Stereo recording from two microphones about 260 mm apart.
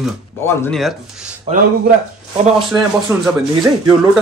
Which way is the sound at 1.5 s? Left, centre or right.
Right.